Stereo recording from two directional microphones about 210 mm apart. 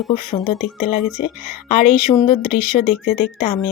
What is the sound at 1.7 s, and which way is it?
Speech, 30° left (ahead or behind).